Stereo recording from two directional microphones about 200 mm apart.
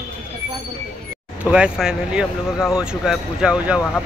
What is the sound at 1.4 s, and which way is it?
Speech, 5° right (ahead or behind).